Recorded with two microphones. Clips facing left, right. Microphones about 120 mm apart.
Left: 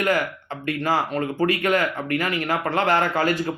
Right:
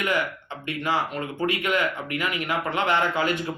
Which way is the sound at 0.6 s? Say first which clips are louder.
Left 3 dB; 40° left (ahead or behind).